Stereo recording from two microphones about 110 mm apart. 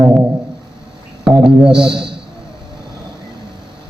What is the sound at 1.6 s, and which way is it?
Speech, 5° right (ahead or behind).